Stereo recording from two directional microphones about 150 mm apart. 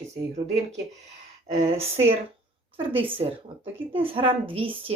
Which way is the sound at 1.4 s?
45° right (ahead or behind).